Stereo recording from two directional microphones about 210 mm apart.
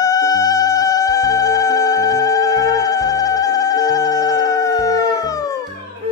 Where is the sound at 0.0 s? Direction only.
15° left (ahead or behind).